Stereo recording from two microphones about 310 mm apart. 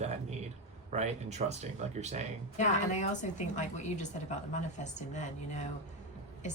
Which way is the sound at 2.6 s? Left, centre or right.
Left.